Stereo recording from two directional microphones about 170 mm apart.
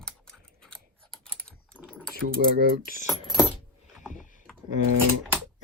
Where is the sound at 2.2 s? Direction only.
55° right (ahead or behind).